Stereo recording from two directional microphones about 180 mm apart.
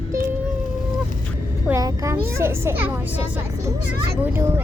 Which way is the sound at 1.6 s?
15° right (ahead or behind).